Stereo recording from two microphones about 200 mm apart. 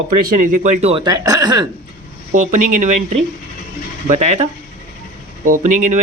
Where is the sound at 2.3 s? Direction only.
40° right (ahead or behind).